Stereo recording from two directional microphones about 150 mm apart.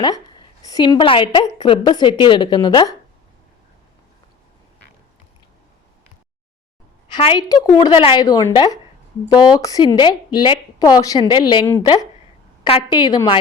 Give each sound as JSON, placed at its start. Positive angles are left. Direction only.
{"t": 0.0, "sound": "a woman's voice", "side_deg": 30}
{"t": 7.3, "sound": "speech", "side_deg": 25}
{"t": 12.6, "sound": "a woman's voice", "side_deg": 35}